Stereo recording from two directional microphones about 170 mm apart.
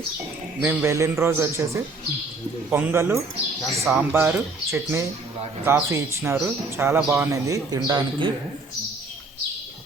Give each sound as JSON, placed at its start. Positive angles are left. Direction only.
{"t": 0.6, "sound": "a man's voice", "side_deg": -10}
{"t": 3.6, "sound": "speech", "side_deg": 0}
{"t": 4.1, "sound": "a man's voice", "side_deg": -10}